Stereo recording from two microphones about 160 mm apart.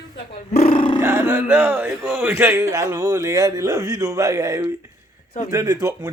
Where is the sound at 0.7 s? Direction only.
35° left (ahead or behind).